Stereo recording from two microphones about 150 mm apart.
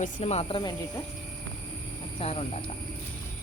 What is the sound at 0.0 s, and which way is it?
Speech, 50° left (ahead or behind).